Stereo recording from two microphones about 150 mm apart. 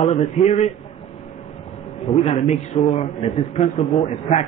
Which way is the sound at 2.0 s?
40° left (ahead or behind).